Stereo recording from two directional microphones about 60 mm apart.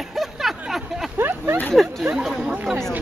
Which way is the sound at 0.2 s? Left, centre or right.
Centre.